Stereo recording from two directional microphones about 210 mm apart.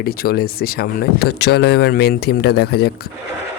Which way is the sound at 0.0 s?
45° left (ahead or behind).